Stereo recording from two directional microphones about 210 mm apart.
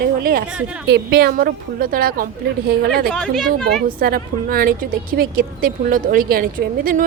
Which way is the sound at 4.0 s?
45° right (ahead or behind).